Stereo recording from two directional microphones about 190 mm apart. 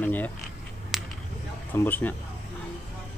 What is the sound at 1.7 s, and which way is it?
Speech, 10° left (ahead or behind).